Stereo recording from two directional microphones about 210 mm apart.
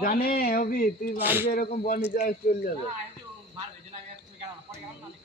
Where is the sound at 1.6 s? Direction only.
40° left (ahead or behind).